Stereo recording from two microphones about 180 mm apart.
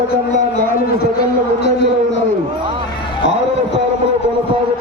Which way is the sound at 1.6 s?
70° left (ahead or behind).